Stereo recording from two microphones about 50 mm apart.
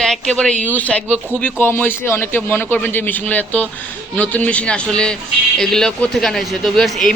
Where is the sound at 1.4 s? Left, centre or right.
Left.